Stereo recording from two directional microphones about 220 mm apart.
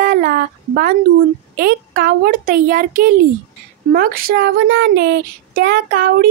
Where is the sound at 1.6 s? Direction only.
40° right (ahead or behind).